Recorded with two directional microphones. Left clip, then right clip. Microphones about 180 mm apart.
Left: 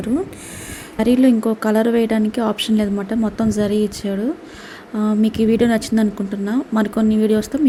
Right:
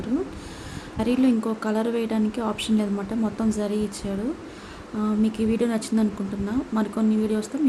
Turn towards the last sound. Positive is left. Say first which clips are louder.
# left 8 dB
turn(degrees=25)  # may be behind; listen again after turning